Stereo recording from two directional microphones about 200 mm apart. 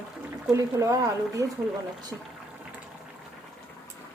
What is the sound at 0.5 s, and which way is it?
Speech, 15° right (ahead or behind).